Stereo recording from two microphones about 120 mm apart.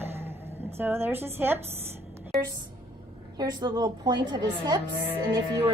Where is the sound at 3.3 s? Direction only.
35° right (ahead or behind).